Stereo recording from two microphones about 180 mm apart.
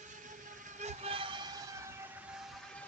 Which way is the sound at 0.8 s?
40° right (ahead or behind).